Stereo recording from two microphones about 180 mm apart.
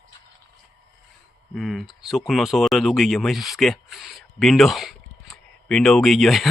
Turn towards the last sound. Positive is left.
turn(degrees=0)  # may be behind; listen again after turning